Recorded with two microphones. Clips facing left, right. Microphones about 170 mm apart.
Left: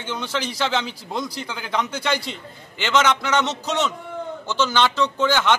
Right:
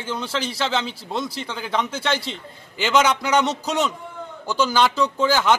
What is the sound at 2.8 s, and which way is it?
Speech, 10° right (ahead or behind).